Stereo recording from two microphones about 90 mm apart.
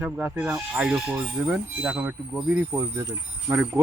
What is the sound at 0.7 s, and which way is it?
Speech, 10° right (ahead or behind).